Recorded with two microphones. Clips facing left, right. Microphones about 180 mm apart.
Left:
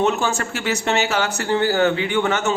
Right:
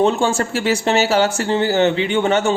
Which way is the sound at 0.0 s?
30° right (ahead or behind).